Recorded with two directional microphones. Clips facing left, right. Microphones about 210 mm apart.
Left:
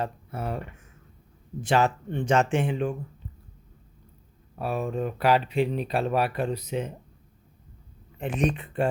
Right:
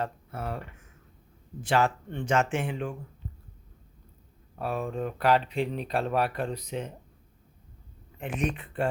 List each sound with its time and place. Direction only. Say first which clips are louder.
0.0 s speech: left 2 dB; 15° left (ahead or behind)
1.6 s speech: left 2 dB; 20° left (ahead or behind)
2.3 s speech: left 3 dB; 30° left (ahead or behind)
4.5 s speech: left 3 dB; 5° left (ahead or behind)
8.2 s speech: left 4 dB; 30° left (ahead or behind)